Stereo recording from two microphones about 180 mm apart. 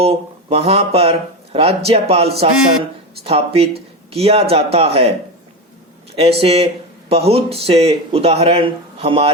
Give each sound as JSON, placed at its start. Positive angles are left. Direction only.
{"t": 0.0, "sound": "speech", "side_deg": -35}
{"t": 6.4, "sound": "speech", "side_deg": -35}